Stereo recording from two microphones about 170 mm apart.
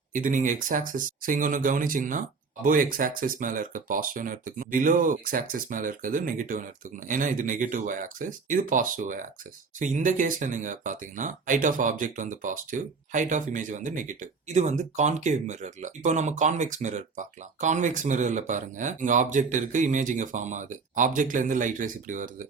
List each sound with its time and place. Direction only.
0.1 s speech: 50° right (ahead or behind)